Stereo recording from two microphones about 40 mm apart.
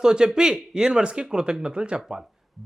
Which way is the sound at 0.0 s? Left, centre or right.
Centre.